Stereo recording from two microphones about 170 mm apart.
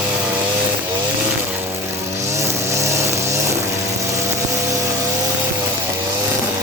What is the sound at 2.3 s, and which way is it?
Vehicle, 15° right (ahead or behind).